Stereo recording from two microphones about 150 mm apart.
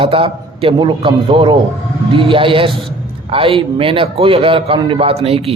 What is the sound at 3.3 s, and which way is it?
A man's voice, 40° right (ahead or behind).